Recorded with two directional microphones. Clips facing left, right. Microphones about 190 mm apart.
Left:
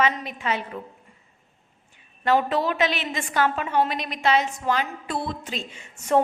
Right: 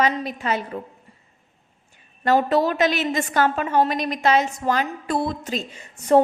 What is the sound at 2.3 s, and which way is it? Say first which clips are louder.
A woman's voice: right 3 dB; 40° right (ahead or behind).